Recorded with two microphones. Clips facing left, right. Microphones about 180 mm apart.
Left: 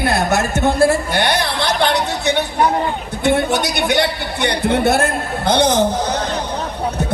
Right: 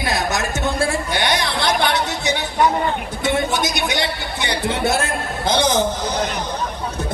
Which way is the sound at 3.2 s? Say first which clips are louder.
Left 5 dB; 60° left (ahead or behind).